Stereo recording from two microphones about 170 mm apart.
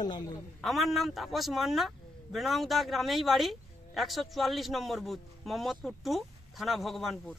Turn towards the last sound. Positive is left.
turn(degrees=0)  # may be behind; listen again after turning